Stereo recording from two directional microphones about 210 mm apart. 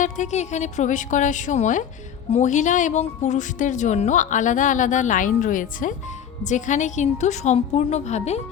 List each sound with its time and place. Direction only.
0.0 s speech: 35° left (ahead or behind)